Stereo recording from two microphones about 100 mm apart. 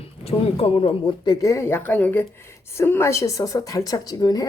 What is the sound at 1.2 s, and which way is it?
Speech, 40° left (ahead or behind).